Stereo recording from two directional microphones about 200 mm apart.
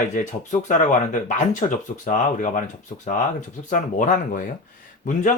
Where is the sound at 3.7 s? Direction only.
40° left (ahead or behind).